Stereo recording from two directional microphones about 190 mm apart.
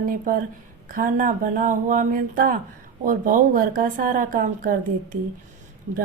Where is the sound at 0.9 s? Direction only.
45° right (ahead or behind).